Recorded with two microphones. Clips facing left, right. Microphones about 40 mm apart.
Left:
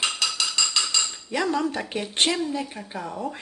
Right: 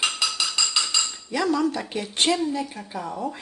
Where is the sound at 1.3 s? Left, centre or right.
Left.